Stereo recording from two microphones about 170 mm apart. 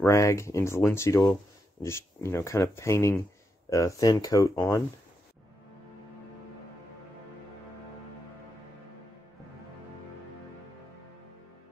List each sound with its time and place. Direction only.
0.0 s speech: 15° left (ahead or behind)